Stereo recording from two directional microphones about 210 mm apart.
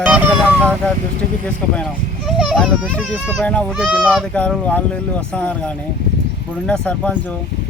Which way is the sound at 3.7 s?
5° right (ahead or behind).